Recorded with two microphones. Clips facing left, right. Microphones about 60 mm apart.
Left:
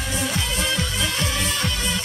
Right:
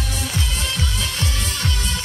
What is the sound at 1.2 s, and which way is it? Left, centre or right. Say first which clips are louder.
Music: left 2 dB; left.